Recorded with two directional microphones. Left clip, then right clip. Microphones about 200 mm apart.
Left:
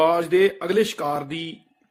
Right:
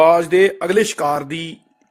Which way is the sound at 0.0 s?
20° right (ahead or behind).